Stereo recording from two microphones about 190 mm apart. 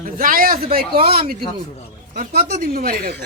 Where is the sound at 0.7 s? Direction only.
30° right (ahead or behind).